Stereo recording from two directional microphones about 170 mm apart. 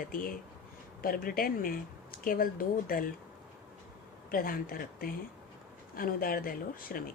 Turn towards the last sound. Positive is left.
turn(degrees=60)  # may be behind; listen again after turning